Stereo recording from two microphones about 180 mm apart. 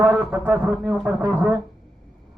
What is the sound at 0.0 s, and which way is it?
A man's voice, 15° right (ahead or behind).